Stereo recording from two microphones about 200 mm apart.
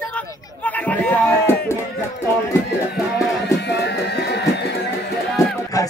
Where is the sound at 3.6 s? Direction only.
55° left (ahead or behind).